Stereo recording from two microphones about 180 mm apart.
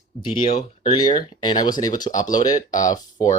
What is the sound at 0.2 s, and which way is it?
Speech, 25° left (ahead or behind).